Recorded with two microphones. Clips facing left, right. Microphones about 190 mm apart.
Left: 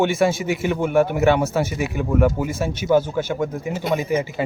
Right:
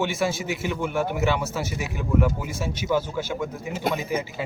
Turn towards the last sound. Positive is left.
turn(degrees=55)  # may be behind; listen again after turning